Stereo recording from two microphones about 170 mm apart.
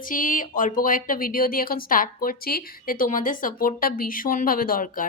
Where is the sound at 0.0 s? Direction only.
50° left (ahead or behind).